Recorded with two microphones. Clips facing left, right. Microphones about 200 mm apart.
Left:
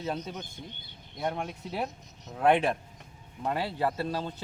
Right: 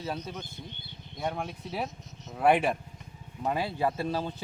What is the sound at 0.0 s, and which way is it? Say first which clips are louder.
Speech: left 1 dB; 5° right (ahead or behind).